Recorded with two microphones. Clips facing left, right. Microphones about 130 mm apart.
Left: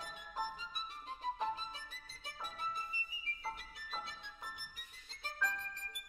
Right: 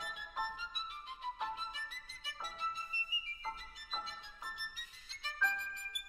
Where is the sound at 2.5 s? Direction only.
55° left (ahead or behind).